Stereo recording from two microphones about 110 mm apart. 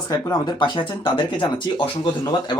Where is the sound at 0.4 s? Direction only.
45° left (ahead or behind).